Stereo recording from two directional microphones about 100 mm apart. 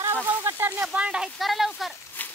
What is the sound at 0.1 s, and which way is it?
Speech, 25° right (ahead or behind).